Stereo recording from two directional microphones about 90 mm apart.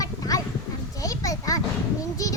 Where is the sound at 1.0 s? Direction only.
40° left (ahead or behind).